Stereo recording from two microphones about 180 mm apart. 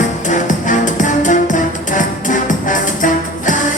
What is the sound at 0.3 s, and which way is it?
Music, 45° left (ahead or behind).